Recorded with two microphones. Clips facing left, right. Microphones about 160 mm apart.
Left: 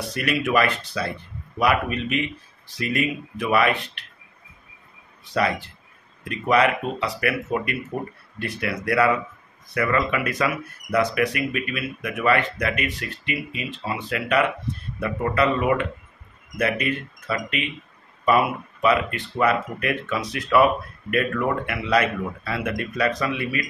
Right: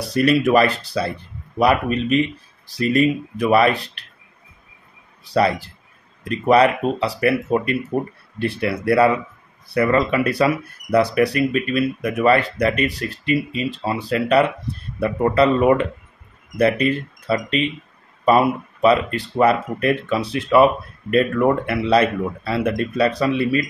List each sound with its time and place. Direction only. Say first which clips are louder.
0.0 s speech: right 8 dB; 35° right (ahead or behind)
5.2 s speech: right 5 dB; 35° right (ahead or behind)